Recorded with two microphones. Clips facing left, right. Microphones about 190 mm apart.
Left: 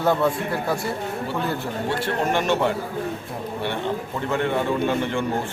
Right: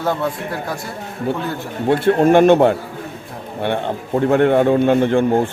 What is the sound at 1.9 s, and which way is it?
A man's voice, 55° right (ahead or behind).